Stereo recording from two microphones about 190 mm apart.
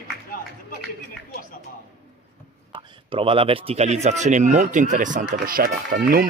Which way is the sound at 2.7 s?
25° right (ahead or behind).